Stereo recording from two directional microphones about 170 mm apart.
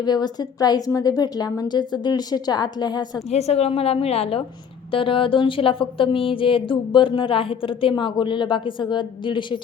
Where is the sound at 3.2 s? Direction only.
40° left (ahead or behind).